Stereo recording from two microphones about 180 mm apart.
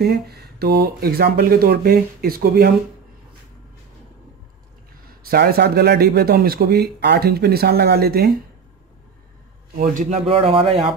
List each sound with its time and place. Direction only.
0.0 s speech: 60° right (ahead or behind)
5.3 s speech: 60° right (ahead or behind)
9.8 s speech: 45° right (ahead or behind)